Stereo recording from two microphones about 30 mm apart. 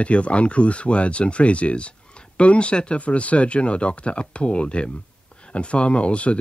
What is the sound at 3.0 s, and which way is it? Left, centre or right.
Speech, left.